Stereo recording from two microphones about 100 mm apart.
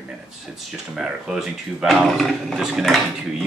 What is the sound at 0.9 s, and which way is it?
Speech, 5° right (ahead or behind).